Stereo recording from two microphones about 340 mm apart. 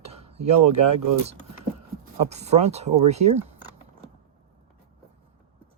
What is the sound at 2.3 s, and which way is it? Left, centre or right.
Speech, centre.